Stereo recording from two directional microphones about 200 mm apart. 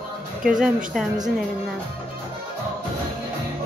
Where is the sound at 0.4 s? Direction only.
5° right (ahead or behind).